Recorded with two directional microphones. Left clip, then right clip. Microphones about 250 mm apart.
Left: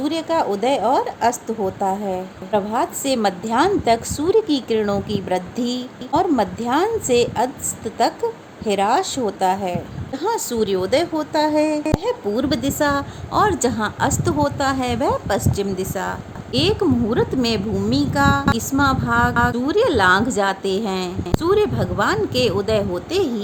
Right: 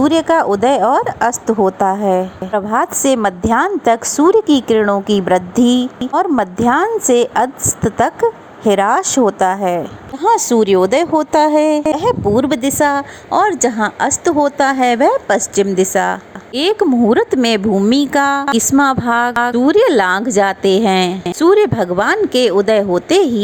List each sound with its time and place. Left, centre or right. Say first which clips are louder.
0.0 s a woman's voice: right 8 dB; right